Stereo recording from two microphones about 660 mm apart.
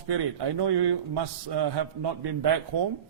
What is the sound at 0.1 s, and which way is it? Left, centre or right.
A man's voice, right.